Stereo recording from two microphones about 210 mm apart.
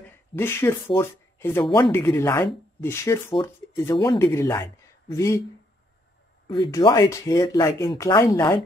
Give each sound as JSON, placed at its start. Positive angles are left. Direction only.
{"t": 0.4, "sound": "speech", "side_deg": 10}
{"t": 6.5, "sound": "speech", "side_deg": 20}